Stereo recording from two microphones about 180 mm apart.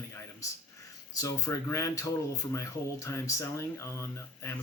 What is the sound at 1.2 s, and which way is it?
Speech, 15° left (ahead or behind).